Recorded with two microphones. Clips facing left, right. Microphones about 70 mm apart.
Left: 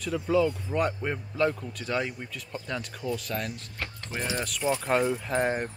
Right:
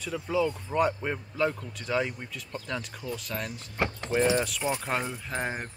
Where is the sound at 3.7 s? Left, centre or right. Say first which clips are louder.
Right 8 dB; right.